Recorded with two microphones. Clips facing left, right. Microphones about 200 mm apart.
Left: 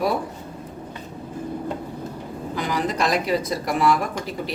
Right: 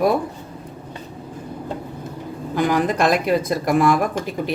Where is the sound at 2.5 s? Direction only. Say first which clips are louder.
Right 6 dB; 55° right (ahead or behind).